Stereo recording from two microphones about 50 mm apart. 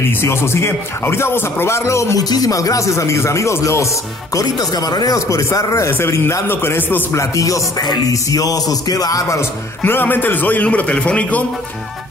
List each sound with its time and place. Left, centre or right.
0.2 s speech: left
2.8 s speech: left
5.1 s a man's voice: left
5.9 s a man's voice: left
6.1 s a man's voice: left
6.4 s a man's voice: left
7.2 s a man's voice: left
9.8 s a man's voice: left